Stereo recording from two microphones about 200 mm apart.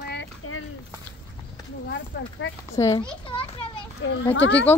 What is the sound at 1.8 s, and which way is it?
Speech, 65° left (ahead or behind).